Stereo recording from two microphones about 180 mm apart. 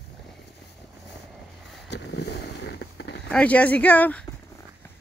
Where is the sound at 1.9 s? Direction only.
70° left (ahead or behind).